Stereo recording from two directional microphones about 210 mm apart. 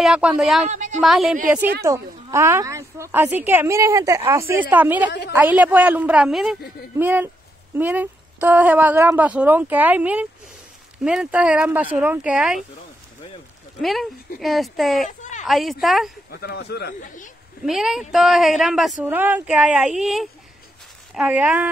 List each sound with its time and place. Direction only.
0.0 s speech: 5° right (ahead or behind)
0.7 s a sound: 35° right (ahead or behind)
1.0 s speech: centre (ahead or behind)
1.8 s speech: 10° right (ahead or behind)
13.7 s speech: centre (ahead or behind)
15.0 s a sound: 35° left (ahead or behind)
15.4 s speech: centre (ahead or behind)
16.3 s speech: 50° left (ahead or behind)
17.6 s speech: centre (ahead or behind)